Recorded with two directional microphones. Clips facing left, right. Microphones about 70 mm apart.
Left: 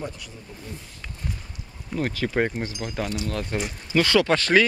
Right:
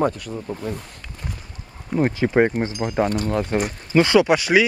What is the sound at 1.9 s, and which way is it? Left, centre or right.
Speech, right.